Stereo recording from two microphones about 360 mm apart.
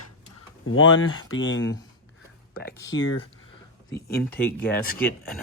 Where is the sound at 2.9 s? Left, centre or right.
Left.